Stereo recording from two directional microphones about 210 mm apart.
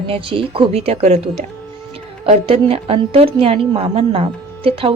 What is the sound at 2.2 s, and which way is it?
A woman's voice, 30° right (ahead or behind).